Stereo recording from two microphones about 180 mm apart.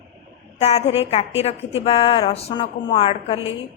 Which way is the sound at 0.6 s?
35° left (ahead or behind).